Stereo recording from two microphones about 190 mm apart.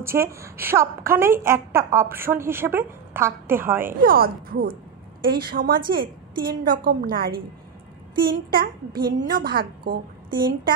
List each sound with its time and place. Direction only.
0.0 s a woman's voice: 15° right (ahead or behind)
4.0 s a child's voice: 50° right (ahead or behind)